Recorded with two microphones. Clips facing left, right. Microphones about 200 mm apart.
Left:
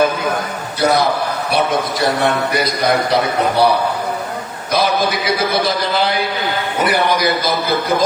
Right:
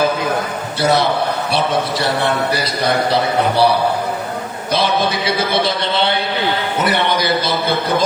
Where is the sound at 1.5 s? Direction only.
30° right (ahead or behind).